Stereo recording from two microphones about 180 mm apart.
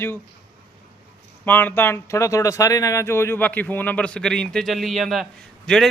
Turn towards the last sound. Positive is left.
turn(degrees=0)  # may be behind; listen again after turning